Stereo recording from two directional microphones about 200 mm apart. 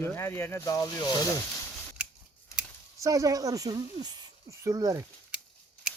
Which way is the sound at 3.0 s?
15° right (ahead or behind).